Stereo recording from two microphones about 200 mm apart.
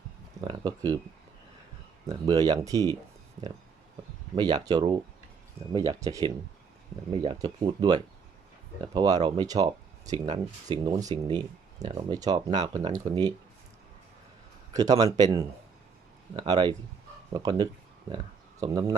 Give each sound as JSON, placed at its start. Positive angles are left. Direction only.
{"t": 0.4, "sound": "speech", "side_deg": -20}
{"t": 2.0, "sound": "speech", "side_deg": -20}
{"t": 3.4, "sound": "speech", "side_deg": -35}
{"t": 4.4, "sound": "speech", "side_deg": -20}
{"t": 7.3, "sound": "speech", "side_deg": -20}
{"t": 14.7, "sound": "a man's voice", "side_deg": -20}